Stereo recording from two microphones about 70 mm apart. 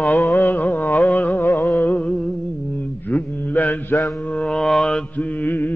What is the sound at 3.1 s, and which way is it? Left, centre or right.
Mantra, left.